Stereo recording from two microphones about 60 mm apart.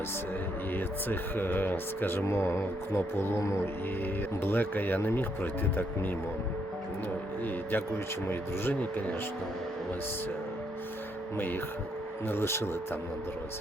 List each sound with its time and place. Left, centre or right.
0.8 s speech: left
2.2 s music: left
4.4 s speech: left
7.4 s speech: left
12.3 s music: left